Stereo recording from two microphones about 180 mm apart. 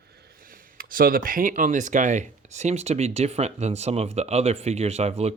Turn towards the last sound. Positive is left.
turn(degrees=-35)  # may be behind; listen again after turning